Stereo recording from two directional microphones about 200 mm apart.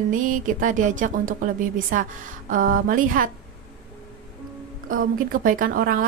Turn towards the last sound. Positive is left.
turn(degrees=-45)  # may be behind; listen again after turning